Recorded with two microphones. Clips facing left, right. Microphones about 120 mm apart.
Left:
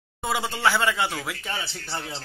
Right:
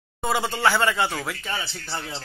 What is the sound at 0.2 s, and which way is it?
Speech, centre (ahead or behind).